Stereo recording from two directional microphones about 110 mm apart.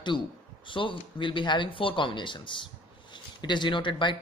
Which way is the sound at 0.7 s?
50° left (ahead or behind).